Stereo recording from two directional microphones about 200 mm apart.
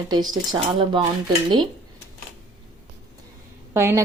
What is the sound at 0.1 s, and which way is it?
Speech, 20° right (ahead or behind).